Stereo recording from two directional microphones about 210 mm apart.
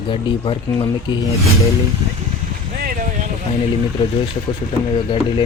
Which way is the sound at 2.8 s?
40° right (ahead or behind).